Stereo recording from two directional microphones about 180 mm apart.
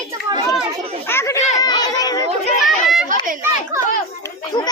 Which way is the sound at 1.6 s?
20° left (ahead or behind).